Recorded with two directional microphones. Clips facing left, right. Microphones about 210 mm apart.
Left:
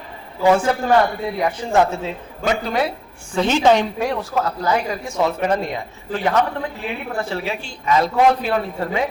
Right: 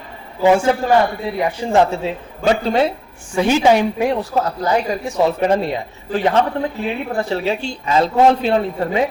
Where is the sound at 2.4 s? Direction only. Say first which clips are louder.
Right 5 dB; 30° right (ahead or behind).